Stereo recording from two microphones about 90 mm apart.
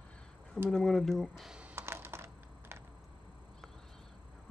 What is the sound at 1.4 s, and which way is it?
Computer keyboard, 10° right (ahead or behind).